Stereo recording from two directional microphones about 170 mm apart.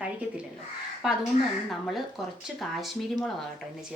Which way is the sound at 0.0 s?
10° right (ahead or behind).